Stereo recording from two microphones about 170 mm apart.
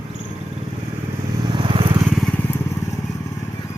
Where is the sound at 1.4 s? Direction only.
30° right (ahead or behind).